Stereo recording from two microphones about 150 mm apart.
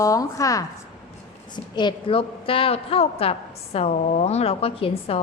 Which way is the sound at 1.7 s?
35° left (ahead or behind).